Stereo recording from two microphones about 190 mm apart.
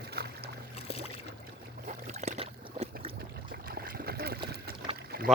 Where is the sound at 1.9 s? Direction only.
40° right (ahead or behind).